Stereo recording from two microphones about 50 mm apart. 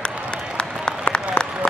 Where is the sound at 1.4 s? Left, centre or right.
Left.